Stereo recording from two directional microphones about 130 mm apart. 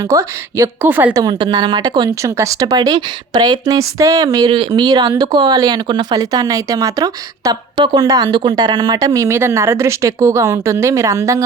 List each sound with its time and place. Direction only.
0.1 s a woman's voice: 20° right (ahead or behind)
1.2 s a woman's voice: 30° right (ahead or behind)